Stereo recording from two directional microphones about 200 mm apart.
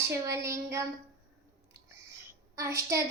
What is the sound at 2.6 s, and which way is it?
Child singing, 15° right (ahead or behind).